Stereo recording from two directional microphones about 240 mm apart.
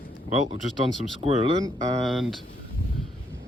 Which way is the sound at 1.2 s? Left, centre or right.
Right.